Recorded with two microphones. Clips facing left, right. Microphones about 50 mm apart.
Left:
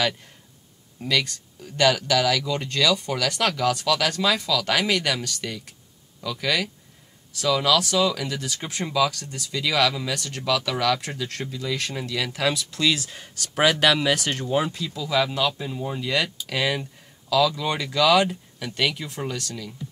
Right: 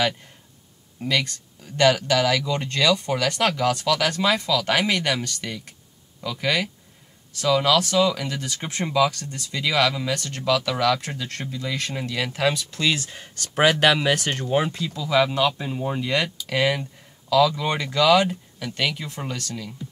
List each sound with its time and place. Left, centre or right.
1.0 s speech: centre
8.7 s speech: centre
12.5 s speech: centre